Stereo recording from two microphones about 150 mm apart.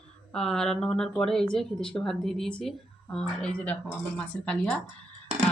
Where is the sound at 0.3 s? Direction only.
5° left (ahead or behind).